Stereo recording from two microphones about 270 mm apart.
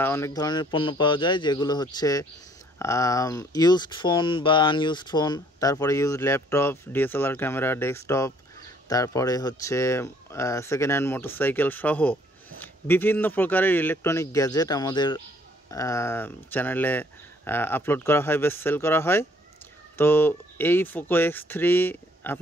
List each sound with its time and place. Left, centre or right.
0.0 s speech: centre